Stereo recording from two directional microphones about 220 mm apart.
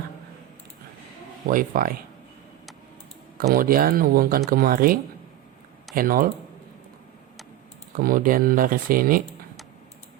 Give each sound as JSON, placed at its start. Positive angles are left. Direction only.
{"t": 1.5, "sound": "speech", "side_deg": -40}
{"t": 3.3, "sound": "speech", "side_deg": -40}
{"t": 7.9, "sound": "speech", "side_deg": -40}